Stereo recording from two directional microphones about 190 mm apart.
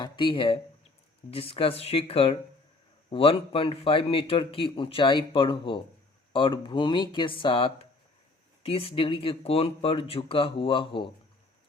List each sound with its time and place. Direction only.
0.0 s a man's voice: 25° left (ahead or behind)